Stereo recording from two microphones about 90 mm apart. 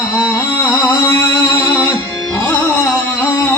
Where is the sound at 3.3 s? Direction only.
30° left (ahead or behind).